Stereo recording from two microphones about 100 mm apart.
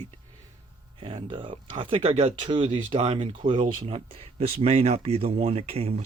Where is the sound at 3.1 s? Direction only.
65° right (ahead or behind).